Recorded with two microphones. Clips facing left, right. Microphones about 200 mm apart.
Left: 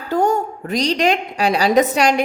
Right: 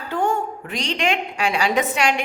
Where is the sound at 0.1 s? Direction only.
40° left (ahead or behind).